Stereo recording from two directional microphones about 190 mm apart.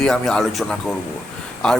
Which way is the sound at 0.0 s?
5° left (ahead or behind).